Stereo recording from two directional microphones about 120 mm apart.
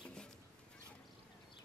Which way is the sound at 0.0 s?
5° left (ahead or behind).